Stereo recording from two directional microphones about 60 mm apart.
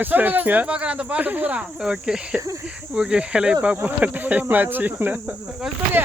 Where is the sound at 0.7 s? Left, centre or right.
Centre.